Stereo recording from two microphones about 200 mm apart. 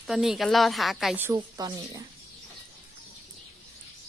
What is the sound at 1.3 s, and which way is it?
Speech, 20° right (ahead or behind).